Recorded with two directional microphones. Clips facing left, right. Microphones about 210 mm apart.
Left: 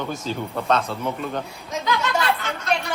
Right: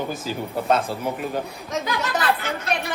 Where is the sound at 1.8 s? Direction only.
35° right (ahead or behind).